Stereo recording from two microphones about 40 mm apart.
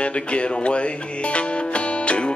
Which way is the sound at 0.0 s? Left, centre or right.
Left.